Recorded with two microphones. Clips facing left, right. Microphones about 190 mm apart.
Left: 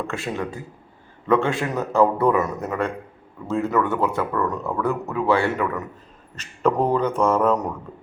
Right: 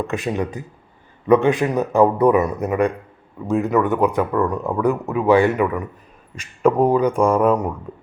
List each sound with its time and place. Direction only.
0.1 s speech: 20° right (ahead or behind)